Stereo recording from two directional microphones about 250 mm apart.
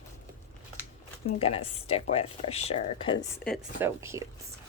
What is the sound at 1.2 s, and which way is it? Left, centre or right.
Speech, left.